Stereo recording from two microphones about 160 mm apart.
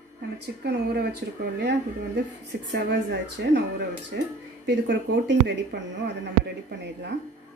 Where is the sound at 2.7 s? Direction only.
90° right.